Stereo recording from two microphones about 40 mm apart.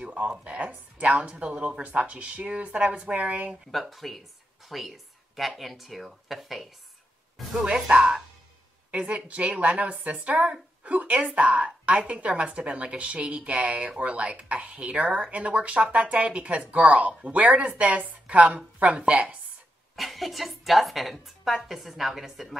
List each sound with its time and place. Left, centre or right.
0.0 s music: right
0.4 s a woman's voice: right
3.7 s a woman's voice: centre
7.5 s speech: right
8.9 s a woman's voice: right
20.0 s a woman's voice: centre